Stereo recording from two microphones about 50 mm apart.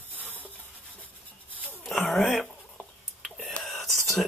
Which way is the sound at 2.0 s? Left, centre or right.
Centre.